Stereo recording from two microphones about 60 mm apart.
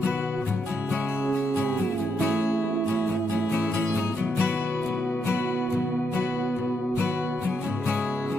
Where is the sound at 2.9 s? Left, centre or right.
Left.